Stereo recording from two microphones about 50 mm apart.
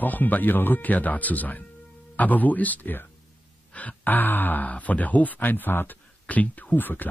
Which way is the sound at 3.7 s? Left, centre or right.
Left.